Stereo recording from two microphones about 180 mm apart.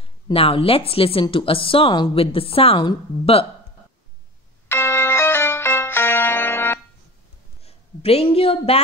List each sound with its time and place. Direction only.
0.0 s speech: 30° left (ahead or behind)
4.6 s music: 10° left (ahead or behind)
7.6 s a woman's voice: 35° left (ahead or behind)